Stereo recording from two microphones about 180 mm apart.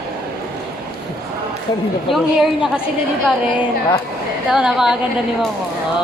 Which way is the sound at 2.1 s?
Centre (ahead or behind).